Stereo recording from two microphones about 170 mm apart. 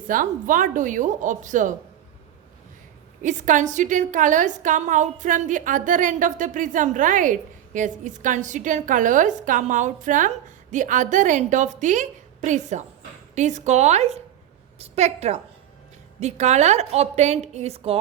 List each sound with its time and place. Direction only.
0.1 s a woman's voice: 50° right (ahead or behind)
3.2 s a woman's voice: 45° right (ahead or behind)